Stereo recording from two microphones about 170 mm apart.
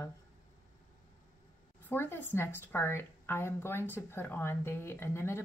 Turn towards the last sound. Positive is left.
turn(degrees=15)  # may be behind; listen again after turning